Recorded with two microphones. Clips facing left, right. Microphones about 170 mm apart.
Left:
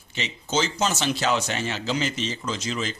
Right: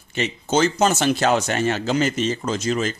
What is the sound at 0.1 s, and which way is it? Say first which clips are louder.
Speech: right 6 dB; 50° right (ahead or behind).